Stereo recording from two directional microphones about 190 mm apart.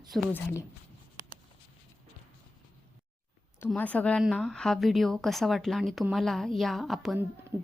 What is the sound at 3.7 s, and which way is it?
A woman's voice, 10° left (ahead or behind).